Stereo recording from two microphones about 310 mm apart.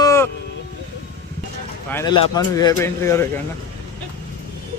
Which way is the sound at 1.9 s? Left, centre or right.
Centre.